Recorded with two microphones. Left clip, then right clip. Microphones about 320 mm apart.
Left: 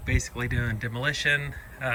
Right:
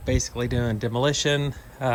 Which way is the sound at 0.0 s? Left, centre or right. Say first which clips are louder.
Right 4 dB; centre.